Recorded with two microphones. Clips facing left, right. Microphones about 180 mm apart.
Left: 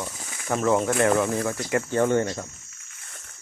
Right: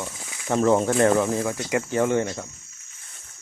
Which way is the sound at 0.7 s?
30° right (ahead or behind).